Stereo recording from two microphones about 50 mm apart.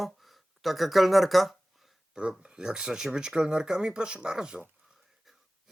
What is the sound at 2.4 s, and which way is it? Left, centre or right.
Speech, centre.